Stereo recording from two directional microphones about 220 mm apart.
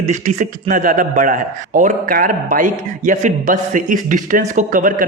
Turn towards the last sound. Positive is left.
turn(degrees=-35)  # may be behind; listen again after turning